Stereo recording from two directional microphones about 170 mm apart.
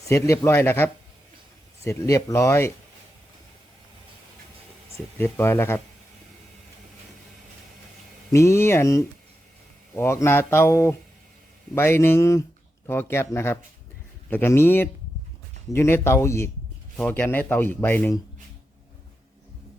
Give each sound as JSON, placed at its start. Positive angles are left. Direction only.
{"t": 0.1, "sound": "speech", "side_deg": 15}
{"t": 5.1, "sound": "speech", "side_deg": 15}
{"t": 8.3, "sound": "speech", "side_deg": 15}